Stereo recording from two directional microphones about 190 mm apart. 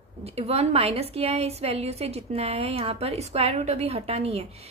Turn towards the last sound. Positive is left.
turn(degrees=-35)  # may be behind; listen again after turning